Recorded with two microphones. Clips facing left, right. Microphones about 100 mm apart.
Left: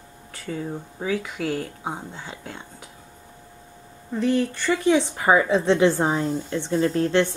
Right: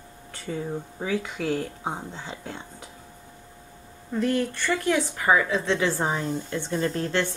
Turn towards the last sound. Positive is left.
turn(degrees=0)  # may be behind; listen again after turning